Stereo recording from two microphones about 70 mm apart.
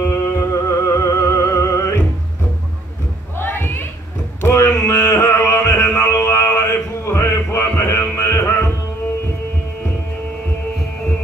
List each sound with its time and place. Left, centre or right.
0.0 s music: left
3.3 s a sound: left
8.2 s music: left